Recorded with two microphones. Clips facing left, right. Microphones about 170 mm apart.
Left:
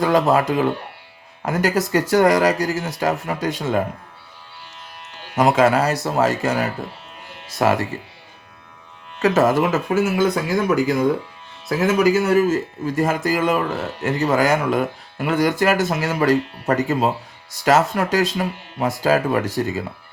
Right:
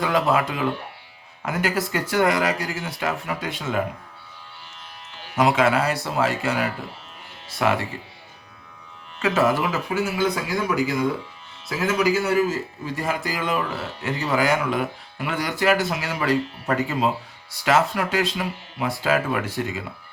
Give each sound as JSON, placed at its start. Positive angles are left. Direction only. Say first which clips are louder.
{"t": 0.0, "sound": "speech", "louder": "left 4 dB", "side_deg": 40}
{"t": 5.4, "sound": "speech", "louder": "left 3 dB", "side_deg": 40}
{"t": 9.1, "sound": "a man's voice", "louder": "left 4 dB", "side_deg": 45}